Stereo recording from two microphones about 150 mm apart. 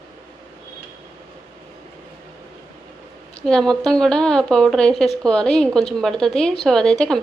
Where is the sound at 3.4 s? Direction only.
5° left (ahead or behind).